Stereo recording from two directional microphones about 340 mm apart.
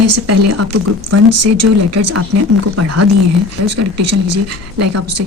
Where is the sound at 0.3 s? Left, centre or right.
Right.